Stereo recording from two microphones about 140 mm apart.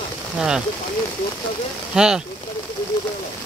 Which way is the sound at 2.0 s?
5° right (ahead or behind).